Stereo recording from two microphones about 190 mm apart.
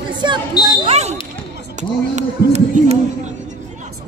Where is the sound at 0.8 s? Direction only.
35° right (ahead or behind).